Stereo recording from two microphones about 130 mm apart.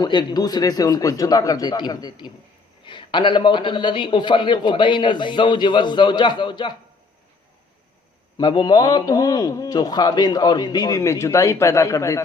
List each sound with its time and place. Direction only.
0.0 s a man's voice: 35° left (ahead or behind)
8.4 s a man's voice: 35° left (ahead or behind)